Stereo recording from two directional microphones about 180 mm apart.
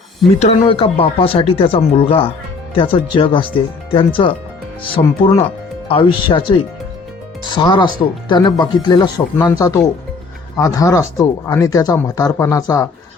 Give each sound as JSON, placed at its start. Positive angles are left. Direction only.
{"t": 0.3, "sound": "speech", "side_deg": 35}